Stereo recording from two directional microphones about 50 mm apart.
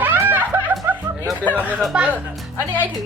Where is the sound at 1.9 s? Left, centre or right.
Right.